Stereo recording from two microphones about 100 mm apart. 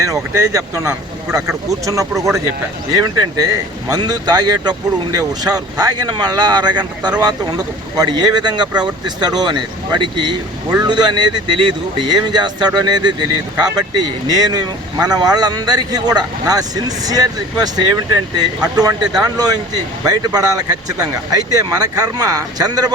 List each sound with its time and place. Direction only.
0.0 s speech: 30° right (ahead or behind)